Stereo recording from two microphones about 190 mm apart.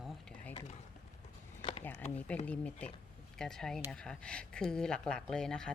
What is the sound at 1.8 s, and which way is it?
A woman's voice, 10° left (ahead or behind).